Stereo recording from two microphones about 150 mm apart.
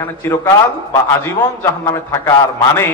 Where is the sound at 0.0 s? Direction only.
15° left (ahead or behind).